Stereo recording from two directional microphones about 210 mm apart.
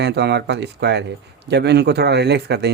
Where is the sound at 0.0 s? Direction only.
55° right (ahead or behind).